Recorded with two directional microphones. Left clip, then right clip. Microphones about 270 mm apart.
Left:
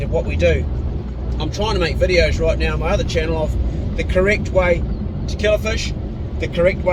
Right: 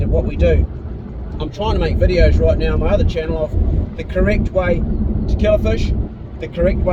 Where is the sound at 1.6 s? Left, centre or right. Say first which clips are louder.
Even; centre.